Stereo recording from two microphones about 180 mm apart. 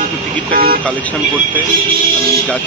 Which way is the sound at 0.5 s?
55° right (ahead or behind).